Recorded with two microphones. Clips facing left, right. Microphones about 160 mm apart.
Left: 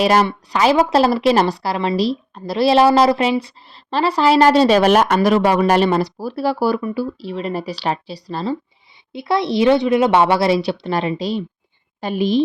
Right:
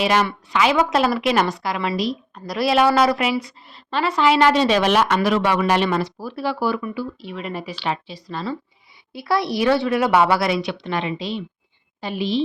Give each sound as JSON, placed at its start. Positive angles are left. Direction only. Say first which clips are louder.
{"t": 0.0, "sound": "a woman's voice", "louder": "left 4 dB", "side_deg": 40}
{"t": 9.1, "sound": "a woman's voice", "louder": "left 4 dB", "side_deg": 20}